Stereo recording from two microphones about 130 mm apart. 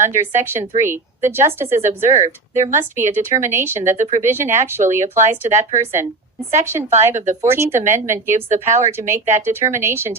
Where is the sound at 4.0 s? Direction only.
75° right (ahead or behind).